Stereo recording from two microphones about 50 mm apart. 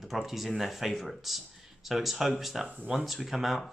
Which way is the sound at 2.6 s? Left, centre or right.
Right.